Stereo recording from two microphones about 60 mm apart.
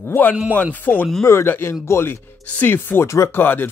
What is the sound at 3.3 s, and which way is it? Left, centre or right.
Speech, left.